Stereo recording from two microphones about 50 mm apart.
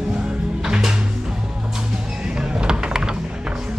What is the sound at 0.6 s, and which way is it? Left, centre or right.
Music, centre.